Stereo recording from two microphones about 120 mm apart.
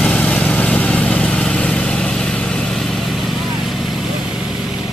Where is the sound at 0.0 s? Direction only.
10° left (ahead or behind).